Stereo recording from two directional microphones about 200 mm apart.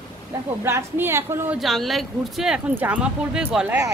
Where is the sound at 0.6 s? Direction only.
10° right (ahead or behind).